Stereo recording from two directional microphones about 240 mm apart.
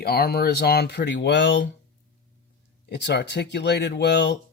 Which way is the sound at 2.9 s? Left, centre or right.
Left.